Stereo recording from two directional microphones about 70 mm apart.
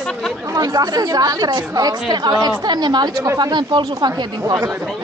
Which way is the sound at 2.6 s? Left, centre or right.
Right.